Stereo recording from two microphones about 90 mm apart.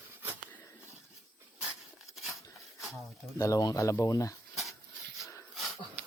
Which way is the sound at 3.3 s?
40° left (ahead or behind).